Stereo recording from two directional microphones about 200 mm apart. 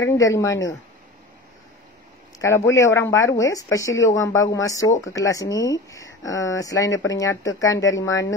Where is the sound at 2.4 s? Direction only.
15° left (ahead or behind).